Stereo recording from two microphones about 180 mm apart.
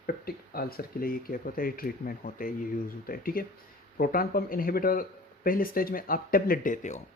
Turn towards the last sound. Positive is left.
turn(degrees=45)  # may be behind; listen again after turning